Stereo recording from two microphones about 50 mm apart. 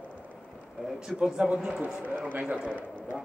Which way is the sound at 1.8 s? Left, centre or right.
Right.